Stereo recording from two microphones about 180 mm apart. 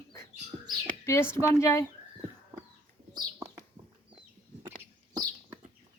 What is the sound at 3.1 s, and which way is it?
Bird, 20° right (ahead or behind).